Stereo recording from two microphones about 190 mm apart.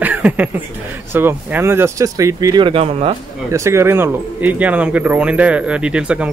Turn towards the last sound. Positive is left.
turn(degrees=-5)  # may be behind; listen again after turning